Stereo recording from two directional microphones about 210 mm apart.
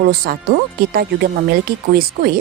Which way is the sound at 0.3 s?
45° right (ahead or behind).